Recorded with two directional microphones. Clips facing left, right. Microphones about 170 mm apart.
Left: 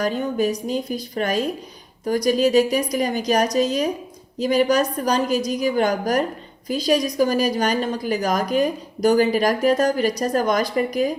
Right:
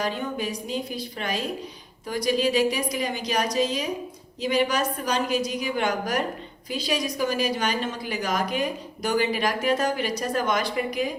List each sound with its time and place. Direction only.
0.0 s a woman's voice: 45° left (ahead or behind)